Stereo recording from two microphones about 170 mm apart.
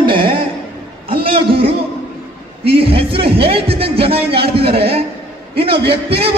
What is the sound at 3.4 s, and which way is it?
Speech, 35° right (ahead or behind).